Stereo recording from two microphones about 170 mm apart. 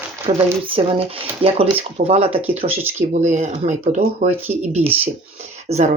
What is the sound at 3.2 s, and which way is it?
Speech, 45° right (ahead or behind).